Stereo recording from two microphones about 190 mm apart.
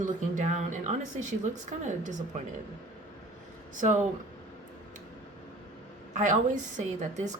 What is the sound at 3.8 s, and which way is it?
Speech, 40° right (ahead or behind).